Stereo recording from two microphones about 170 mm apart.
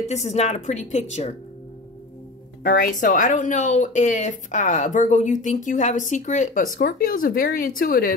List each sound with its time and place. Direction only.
0.1 s a woman's voice: 40° left (ahead or behind)
2.8 s speech: 50° left (ahead or behind)